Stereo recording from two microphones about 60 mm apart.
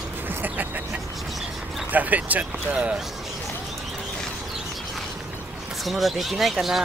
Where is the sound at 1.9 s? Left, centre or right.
Right.